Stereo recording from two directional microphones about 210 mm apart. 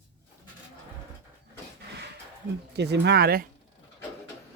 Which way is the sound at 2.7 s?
50° right (ahead or behind).